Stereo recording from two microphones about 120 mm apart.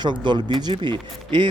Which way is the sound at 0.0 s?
40° right (ahead or behind).